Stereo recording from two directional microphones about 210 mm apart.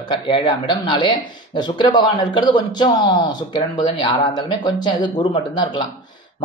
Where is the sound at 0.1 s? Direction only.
20° left (ahead or behind).